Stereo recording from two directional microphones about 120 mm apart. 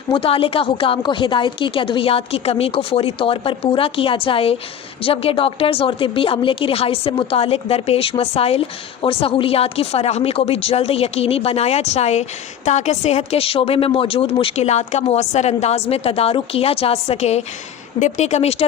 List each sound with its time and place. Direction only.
0.1 s speech: 50° left (ahead or behind); by 12.2 s 65° left (ahead or behind)
12.6 s a woman's voice: 75° left (ahead or behind)